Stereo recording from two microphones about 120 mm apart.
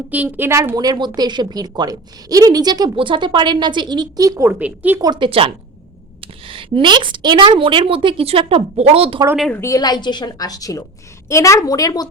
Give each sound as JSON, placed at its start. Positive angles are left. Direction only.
{"t": 0.1, "sound": "a woman's voice", "side_deg": -15}
{"t": 4.6, "sound": "speech", "side_deg": -15}
{"t": 4.9, "sound": "a woman's voice", "side_deg": -35}
{"t": 9.6, "sound": "a woman's voice", "side_deg": 30}